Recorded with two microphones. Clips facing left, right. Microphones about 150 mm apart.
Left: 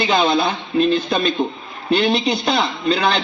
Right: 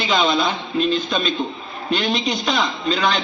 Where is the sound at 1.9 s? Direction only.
30° left (ahead or behind).